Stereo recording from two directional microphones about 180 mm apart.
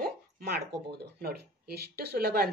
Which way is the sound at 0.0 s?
60° right (ahead or behind).